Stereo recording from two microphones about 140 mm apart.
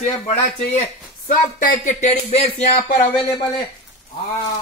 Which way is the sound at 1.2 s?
65° left (ahead or behind).